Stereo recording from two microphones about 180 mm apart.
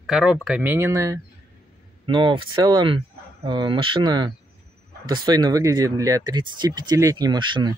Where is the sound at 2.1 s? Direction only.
30° right (ahead or behind).